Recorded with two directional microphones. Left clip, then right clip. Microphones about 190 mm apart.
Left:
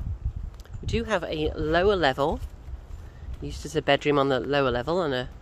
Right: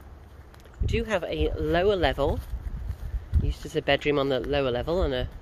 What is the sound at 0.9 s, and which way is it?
Speech, 25° left (ahead or behind).